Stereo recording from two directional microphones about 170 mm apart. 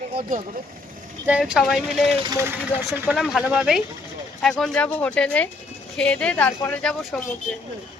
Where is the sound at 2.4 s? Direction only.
10° right (ahead or behind); by 7.2 s 5° left (ahead or behind).